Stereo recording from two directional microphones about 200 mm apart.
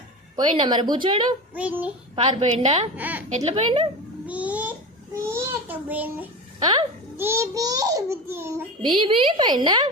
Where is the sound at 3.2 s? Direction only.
35° right (ahead or behind).